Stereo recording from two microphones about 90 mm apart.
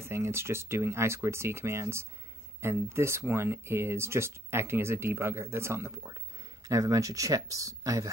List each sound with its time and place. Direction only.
0.0 s speech: 30° right (ahead or behind)
6.7 s speech: 40° right (ahead or behind)